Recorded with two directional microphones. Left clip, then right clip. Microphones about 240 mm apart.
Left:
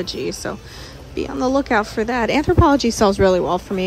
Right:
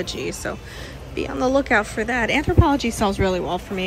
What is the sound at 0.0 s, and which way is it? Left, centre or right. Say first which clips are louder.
A woman's voice: left 2 dB; centre.